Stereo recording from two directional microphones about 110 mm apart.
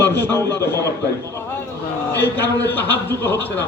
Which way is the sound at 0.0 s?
20° left (ahead or behind).